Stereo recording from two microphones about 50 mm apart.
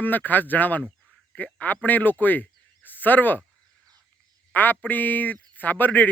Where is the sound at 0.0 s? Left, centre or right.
Left.